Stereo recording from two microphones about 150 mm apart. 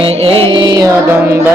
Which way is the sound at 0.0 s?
40° right (ahead or behind).